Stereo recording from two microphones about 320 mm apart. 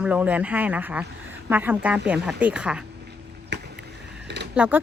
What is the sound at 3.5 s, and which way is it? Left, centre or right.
Boat, right.